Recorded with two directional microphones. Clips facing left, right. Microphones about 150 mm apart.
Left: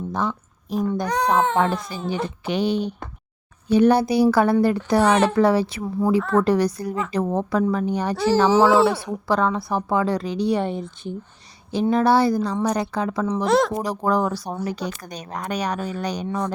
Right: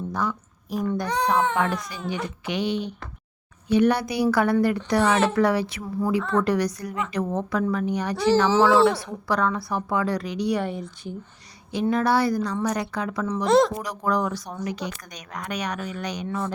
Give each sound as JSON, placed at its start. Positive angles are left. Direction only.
{"t": 0.1, "sound": "a sound", "side_deg": 25}
{"t": 0.9, "sound": "a child's voice", "side_deg": 20}
{"t": 8.4, "sound": "speech", "side_deg": 15}
{"t": 9.2, "sound": "a child's voice", "side_deg": 25}
{"t": 13.4, "sound": "a woman's voice", "side_deg": 5}
{"t": 13.7, "sound": "speech", "side_deg": 30}